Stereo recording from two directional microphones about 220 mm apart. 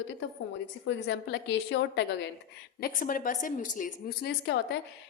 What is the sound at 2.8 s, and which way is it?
A woman's voice, 40° left (ahead or behind).